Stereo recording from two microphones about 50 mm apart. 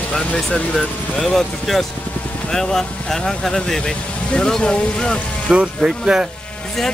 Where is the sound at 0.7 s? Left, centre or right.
Centre.